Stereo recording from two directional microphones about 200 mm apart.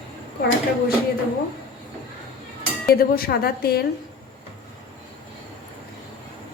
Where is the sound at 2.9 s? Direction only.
50° left (ahead or behind).